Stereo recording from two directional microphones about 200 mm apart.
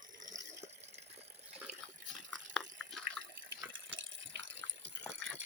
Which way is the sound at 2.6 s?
Centre (ahead or behind).